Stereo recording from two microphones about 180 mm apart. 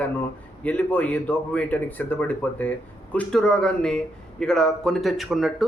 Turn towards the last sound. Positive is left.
turn(degrees=0)  # may be behind; listen again after turning